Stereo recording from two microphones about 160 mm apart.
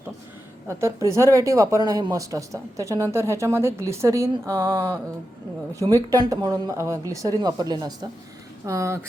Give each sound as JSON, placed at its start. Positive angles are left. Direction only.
{"t": 0.7, "sound": "speech", "side_deg": -15}